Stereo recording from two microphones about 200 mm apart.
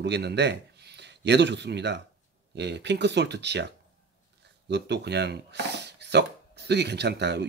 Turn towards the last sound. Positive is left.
turn(degrees=-55)  # may be behind; listen again after turning